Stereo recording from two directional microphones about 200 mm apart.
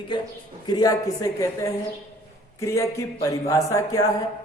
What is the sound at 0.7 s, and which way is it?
A woman's voice, 20° left (ahead or behind).